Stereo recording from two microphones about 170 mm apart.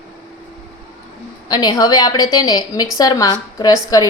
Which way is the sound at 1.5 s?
20° left (ahead or behind).